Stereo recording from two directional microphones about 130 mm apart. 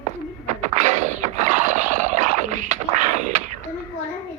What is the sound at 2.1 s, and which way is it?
Dog, 70° right (ahead or behind).